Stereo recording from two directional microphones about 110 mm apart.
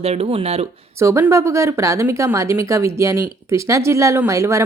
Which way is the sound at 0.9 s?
25° right (ahead or behind).